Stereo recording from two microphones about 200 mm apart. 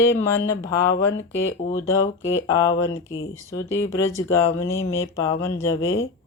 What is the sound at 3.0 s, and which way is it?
Speech, 85° left.